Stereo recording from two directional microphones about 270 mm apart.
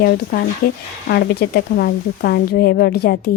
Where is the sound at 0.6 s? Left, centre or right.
Left.